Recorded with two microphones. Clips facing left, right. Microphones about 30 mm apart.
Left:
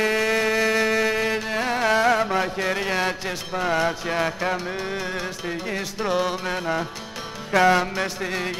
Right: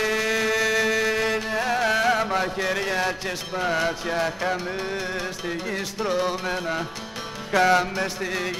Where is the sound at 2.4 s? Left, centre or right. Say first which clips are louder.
Left 1 dB; left.